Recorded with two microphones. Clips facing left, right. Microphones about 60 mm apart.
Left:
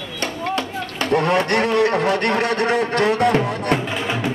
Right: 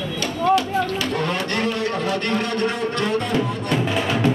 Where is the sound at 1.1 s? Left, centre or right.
Left.